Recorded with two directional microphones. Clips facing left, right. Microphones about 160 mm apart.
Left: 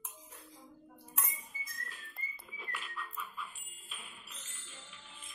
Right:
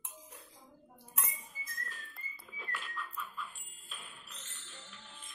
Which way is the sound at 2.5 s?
5° left (ahead or behind).